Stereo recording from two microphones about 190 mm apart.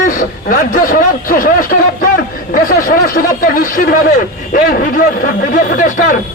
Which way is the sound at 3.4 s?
45° left (ahead or behind).